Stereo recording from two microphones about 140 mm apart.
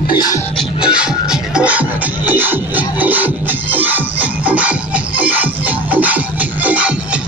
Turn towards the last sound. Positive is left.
turn(degrees=-10)  # may be behind; listen again after turning